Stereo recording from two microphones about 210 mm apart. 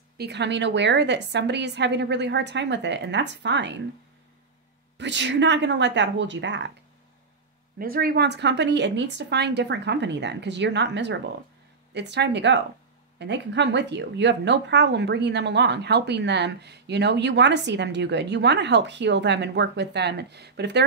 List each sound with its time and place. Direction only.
0.2 s a woman's voice: 55° right (ahead or behind)
4.9 s a woman's voice: 55° right (ahead or behind)
7.8 s a woman's voice: 45° right (ahead or behind)